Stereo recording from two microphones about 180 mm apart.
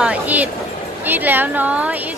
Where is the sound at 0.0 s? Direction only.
10° right (ahead or behind).